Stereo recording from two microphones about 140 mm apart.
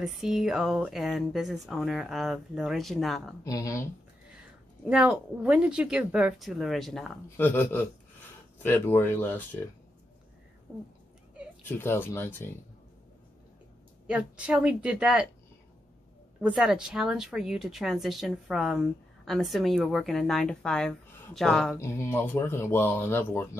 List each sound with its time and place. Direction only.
0.0 s speech: 5° right (ahead or behind)
3.4 s speech: 25° left (ahead or behind)
4.8 s speech: 5° right (ahead or behind)
7.2 s speech: 15° left (ahead or behind)
10.7 s speech: 15° right (ahead or behind)
11.6 s speech: 15° left (ahead or behind)
14.0 s speech: 10° right (ahead or behind)
16.3 s speech: 5° right (ahead or behind)
21.7 s speech: 20° left (ahead or behind)